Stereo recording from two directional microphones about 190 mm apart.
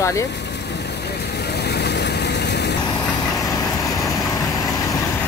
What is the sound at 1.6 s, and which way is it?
Vehicle, 60° left (ahead or behind).